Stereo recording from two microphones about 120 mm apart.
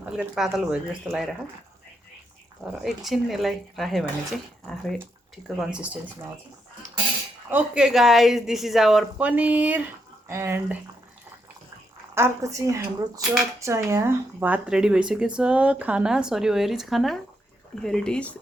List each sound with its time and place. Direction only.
0.0 s a woman's voice: 5° right (ahead or behind)
2.8 s a woman's voice: centre (ahead or behind)
5.5 s speech: 10° right (ahead or behind)
7.5 s a woman's voice: 10° right (ahead or behind)
12.1 s a woman's voice: 25° right (ahead or behind); by 18.3 s 10° left (ahead or behind)